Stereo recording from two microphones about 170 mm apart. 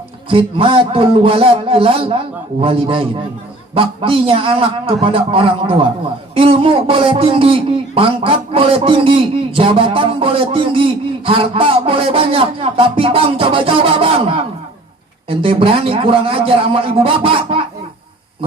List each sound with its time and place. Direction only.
0.3 s a man's voice: 30° right (ahead or behind)